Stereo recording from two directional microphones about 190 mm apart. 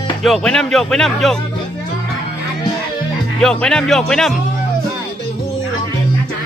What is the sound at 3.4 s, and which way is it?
Speech, 5° left (ahead or behind).